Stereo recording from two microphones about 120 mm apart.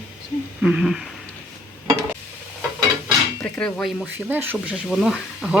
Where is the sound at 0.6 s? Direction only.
5° right (ahead or behind).